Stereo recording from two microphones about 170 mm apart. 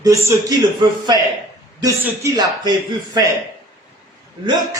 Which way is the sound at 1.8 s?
15° right (ahead or behind).